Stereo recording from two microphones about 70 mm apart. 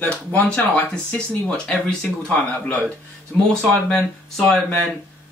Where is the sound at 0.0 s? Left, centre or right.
Left.